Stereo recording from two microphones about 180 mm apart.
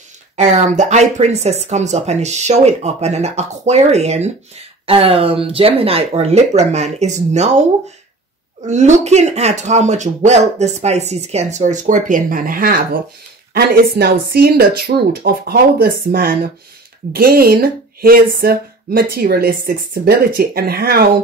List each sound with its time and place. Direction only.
0.4 s speech: 40° right (ahead or behind)
8.6 s speech: 40° right (ahead or behind); by 21.1 s 60° right (ahead or behind)